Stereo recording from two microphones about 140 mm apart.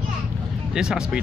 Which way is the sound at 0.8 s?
5° right (ahead or behind).